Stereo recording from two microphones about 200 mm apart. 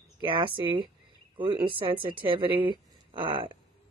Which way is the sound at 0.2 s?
25° right (ahead or behind).